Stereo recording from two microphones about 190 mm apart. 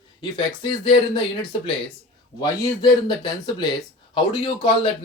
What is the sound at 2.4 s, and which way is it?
Speech, 25° left (ahead or behind).